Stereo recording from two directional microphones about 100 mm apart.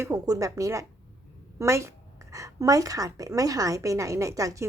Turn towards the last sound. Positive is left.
turn(degrees=-35)  # may be behind; listen again after turning